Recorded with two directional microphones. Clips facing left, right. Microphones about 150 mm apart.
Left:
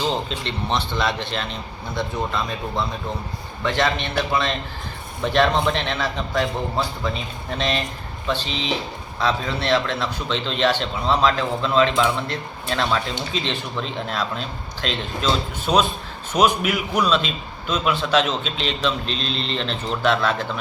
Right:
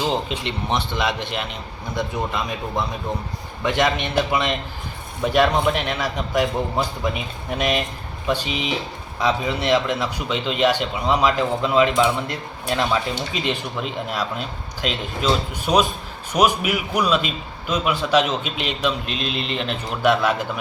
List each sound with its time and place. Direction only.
0.0 s a man's voice: 15° right (ahead or behind)